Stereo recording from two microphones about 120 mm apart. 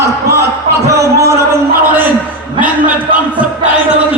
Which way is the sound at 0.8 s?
25° right (ahead or behind).